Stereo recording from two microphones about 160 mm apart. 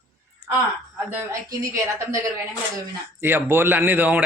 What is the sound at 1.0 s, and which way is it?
Speech, 15° right (ahead or behind).